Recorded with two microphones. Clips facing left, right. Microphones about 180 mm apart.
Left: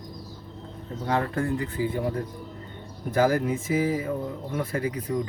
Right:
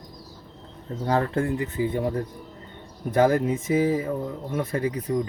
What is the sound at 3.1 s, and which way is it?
Speech, 25° right (ahead or behind).